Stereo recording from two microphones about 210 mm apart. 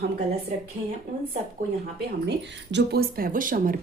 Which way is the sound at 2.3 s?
50° right (ahead or behind).